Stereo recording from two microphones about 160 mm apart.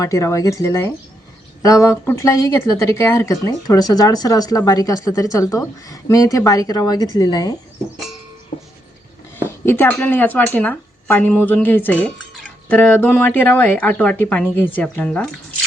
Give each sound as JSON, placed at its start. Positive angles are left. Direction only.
{"t": 0.0, "sound": "speech", "side_deg": 20}
{"t": 9.4, "sound": "speech", "side_deg": 15}